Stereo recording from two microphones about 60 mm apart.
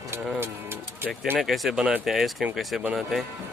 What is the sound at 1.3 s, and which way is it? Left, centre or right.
Speech, centre.